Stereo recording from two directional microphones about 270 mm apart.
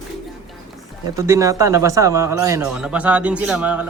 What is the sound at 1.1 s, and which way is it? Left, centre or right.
A man's voice, centre.